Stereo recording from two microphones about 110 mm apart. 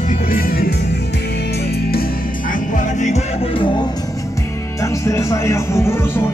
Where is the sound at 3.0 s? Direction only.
90° left.